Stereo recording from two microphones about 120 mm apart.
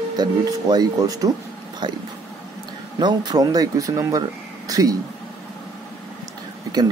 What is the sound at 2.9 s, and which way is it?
Speech, 35° right (ahead or behind).